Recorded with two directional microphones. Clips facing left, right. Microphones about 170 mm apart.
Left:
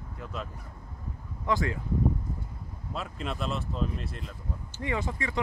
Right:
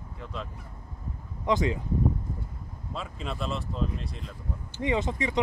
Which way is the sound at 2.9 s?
Centre (ahead or behind).